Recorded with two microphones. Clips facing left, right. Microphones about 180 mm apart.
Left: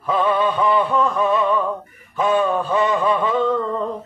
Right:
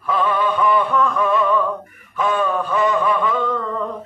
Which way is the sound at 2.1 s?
25° left (ahead or behind).